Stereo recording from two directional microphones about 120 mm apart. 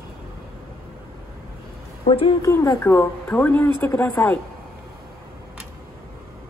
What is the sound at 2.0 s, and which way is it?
Speech, 50° left (ahead or behind).